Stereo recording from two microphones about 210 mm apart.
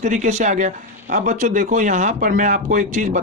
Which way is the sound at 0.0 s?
35° right (ahead or behind).